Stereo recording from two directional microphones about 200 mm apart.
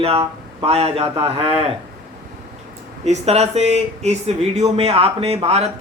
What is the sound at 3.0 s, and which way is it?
Speech, 35° right (ahead or behind).